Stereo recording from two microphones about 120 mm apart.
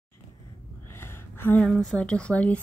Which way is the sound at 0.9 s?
20° left (ahead or behind).